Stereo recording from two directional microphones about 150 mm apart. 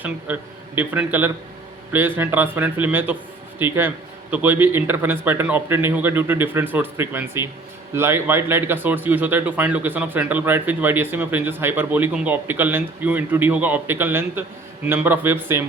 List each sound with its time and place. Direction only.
0.3 s speech: 10° right (ahead or behind)